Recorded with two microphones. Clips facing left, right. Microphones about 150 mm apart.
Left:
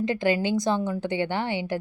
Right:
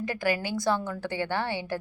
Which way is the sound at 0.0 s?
20° left (ahead or behind).